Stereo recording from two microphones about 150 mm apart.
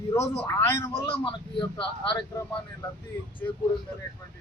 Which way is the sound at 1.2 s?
30° left (ahead or behind).